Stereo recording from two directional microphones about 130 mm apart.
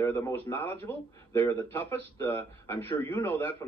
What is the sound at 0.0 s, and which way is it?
A man's voice, 20° left (ahead or behind).